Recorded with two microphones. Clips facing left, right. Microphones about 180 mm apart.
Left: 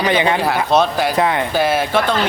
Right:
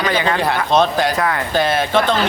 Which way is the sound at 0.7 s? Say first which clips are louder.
Right 1 dB; 5° left (ahead or behind).